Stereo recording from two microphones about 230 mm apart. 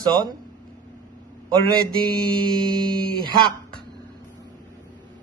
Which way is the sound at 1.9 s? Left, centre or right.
Centre.